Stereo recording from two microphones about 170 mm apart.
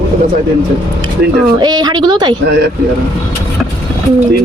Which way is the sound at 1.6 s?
25° right (ahead or behind).